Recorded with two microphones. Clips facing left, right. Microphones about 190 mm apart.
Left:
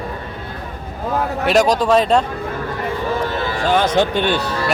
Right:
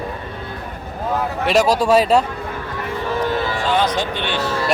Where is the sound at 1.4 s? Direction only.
5° right (ahead or behind).